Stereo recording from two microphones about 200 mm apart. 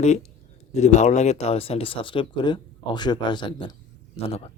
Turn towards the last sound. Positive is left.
turn(degrees=30)  # may be behind; listen again after turning